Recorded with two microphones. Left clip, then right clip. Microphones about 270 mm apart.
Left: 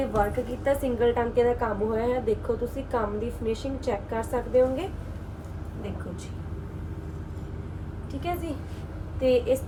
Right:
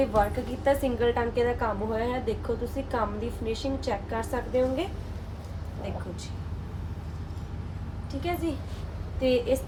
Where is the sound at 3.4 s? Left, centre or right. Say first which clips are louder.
Even; centre.